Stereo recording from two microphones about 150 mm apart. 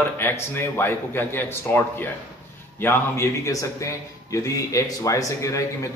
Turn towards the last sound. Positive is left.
turn(degrees=20)  # may be behind; listen again after turning